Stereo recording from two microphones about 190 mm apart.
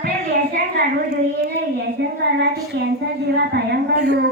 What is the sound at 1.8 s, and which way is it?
Child singing, 65° right (ahead or behind).